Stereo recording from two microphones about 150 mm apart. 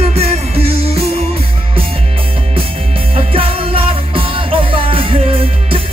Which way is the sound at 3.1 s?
40° right (ahead or behind).